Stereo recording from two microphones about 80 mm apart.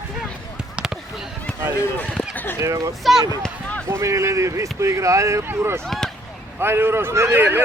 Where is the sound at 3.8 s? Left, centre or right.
Right.